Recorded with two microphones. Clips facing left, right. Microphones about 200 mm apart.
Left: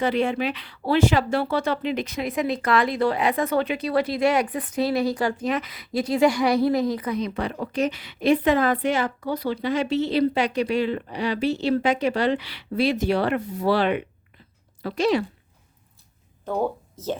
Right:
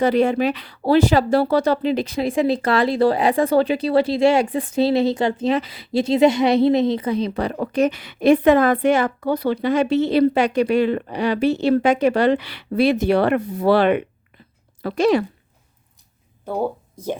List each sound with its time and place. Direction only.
0.0 s a woman's voice: 40° right (ahead or behind)
16.5 s speech: 10° right (ahead or behind)